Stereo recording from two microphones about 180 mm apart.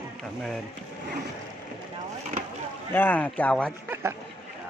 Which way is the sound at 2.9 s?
10° left (ahead or behind).